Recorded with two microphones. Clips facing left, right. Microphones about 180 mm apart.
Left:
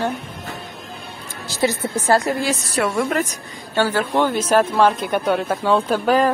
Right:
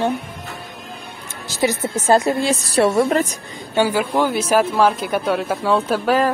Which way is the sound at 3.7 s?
15° right (ahead or behind).